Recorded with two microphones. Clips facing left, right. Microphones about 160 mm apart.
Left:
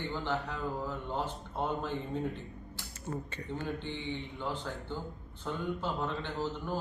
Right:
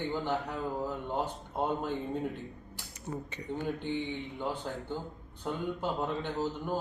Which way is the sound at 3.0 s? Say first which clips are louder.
Right 1 dB; 15° right (ahead or behind).